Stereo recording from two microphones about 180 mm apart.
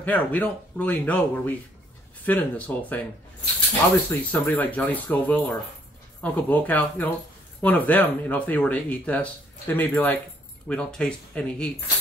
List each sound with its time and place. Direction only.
0.0 s speech: 10° left (ahead or behind)
4.1 s speech: 10° left (ahead or behind)